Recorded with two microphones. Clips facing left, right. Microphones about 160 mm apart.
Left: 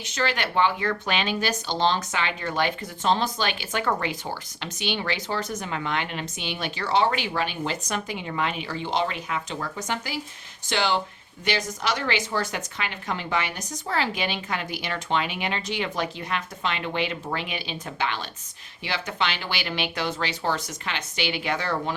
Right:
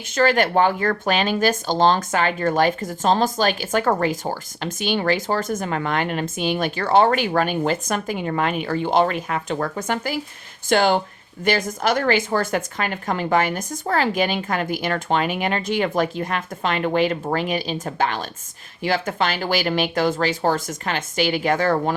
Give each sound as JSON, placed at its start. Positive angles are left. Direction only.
{"t": 0.1, "sound": "speech", "side_deg": -50}